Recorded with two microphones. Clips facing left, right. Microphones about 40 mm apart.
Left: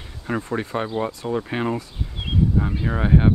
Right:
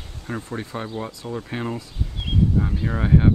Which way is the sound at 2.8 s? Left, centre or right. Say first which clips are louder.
Even; centre.